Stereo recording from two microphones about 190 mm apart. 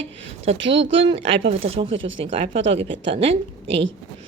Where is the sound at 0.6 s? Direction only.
75° right (ahead or behind).